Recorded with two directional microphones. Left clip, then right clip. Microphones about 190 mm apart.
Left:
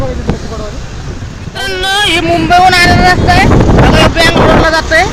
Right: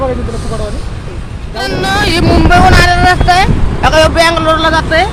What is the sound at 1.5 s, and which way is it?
Speech, centre (ahead or behind).